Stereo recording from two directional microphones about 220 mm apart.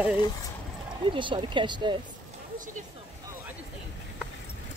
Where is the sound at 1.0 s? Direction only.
20° right (ahead or behind).